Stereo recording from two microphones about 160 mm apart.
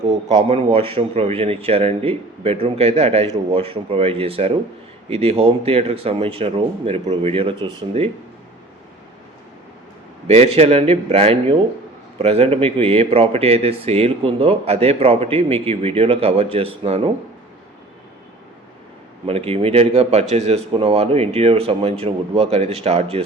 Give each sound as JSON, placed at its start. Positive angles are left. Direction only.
{"t": 0.1, "sound": "speech", "side_deg": -40}
{"t": 10.2, "sound": "speech", "side_deg": -40}
{"t": 19.2, "sound": "speech", "side_deg": -35}